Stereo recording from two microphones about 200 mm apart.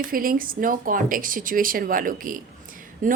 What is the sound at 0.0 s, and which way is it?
Speech, 45° right (ahead or behind).